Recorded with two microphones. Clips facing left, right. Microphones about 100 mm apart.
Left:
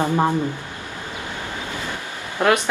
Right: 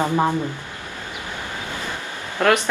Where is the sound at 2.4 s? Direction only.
20° left (ahead or behind).